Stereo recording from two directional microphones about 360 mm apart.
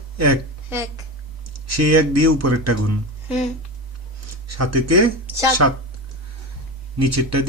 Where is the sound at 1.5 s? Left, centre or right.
Right.